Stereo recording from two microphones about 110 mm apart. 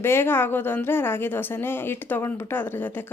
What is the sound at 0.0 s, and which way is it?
Speech, 20° left (ahead or behind).